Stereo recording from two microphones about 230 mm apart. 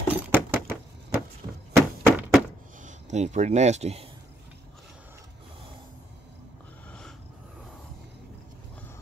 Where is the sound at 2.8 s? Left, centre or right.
Right.